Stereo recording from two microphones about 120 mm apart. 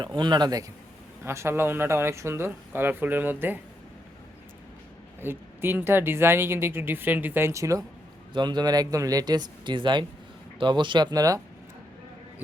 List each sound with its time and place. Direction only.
0.0 s speech: 40° right (ahead or behind)
1.2 s a woman's voice: 20° right (ahead or behind)
5.2 s a woman's voice: 20° right (ahead or behind)
8.3 s speech: 40° right (ahead or behind)